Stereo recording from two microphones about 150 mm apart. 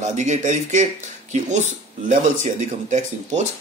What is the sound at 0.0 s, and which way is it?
A man's voice, 50° right (ahead or behind).